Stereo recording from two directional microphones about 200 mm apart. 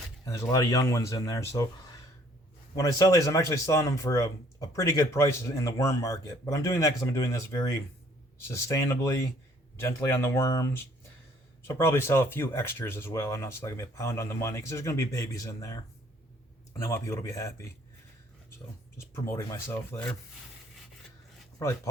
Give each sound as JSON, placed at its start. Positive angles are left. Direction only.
{"t": 0.3, "sound": "speech", "side_deg": 15}
{"t": 16.8, "sound": "speech", "side_deg": 15}
{"t": 18.9, "sound": "speech", "side_deg": 15}